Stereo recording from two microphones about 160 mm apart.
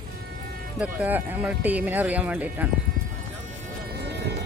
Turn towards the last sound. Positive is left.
turn(degrees=-90)